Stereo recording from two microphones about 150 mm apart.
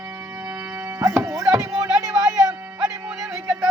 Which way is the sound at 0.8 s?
20° right (ahead or behind).